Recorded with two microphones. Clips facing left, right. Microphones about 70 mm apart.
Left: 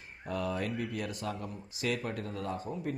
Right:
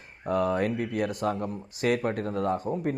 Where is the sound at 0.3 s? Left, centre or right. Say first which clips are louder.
Right 9 dB; right.